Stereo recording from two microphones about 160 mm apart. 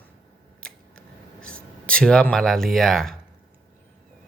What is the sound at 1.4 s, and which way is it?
Speech, 5° left (ahead or behind).